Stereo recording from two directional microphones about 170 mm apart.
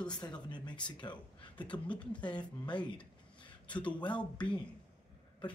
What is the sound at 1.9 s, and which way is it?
Speech, 5° left (ahead or behind).